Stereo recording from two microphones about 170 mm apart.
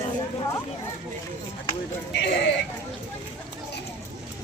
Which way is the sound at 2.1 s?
75° left (ahead or behind).